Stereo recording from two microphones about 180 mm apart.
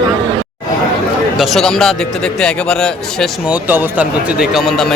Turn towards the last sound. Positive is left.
turn(degrees=0)  # may be behind; listen again after turning